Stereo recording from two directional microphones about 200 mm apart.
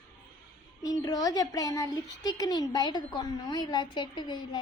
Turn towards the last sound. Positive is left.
turn(degrees=25)  # may be behind; listen again after turning